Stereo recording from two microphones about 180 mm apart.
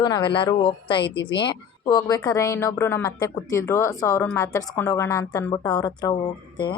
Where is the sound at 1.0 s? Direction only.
70° left (ahead or behind).